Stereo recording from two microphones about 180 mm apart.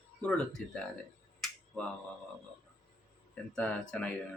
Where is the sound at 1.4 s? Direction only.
5° left (ahead or behind).